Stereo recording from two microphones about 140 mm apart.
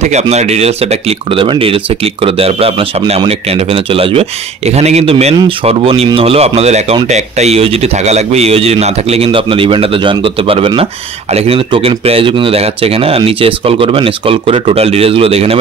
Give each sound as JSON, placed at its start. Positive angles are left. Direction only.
{"t": 0.0, "sound": "speech", "side_deg": -55}